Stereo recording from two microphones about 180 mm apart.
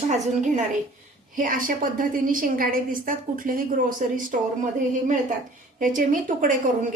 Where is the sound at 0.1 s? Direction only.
45° right (ahead or behind).